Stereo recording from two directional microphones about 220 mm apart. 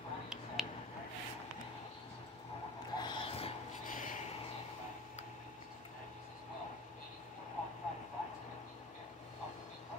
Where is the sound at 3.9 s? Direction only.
35° left (ahead or behind).